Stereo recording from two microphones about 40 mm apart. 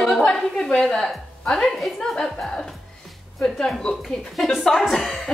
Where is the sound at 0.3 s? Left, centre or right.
Centre.